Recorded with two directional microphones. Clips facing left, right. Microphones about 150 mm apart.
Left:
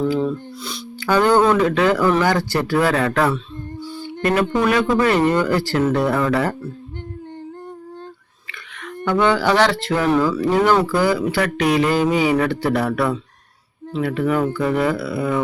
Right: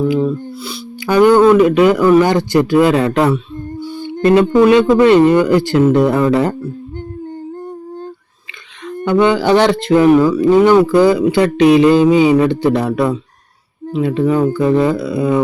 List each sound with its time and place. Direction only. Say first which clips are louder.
0.0 s speech: right 5 dB; 10° right (ahead or behind)
9.0 s speech: right 5 dB; 15° right (ahead or behind)